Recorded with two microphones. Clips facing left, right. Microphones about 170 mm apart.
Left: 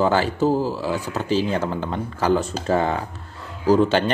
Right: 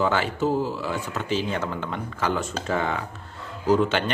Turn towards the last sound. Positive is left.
turn(degrees=35)  # may be behind; listen again after turning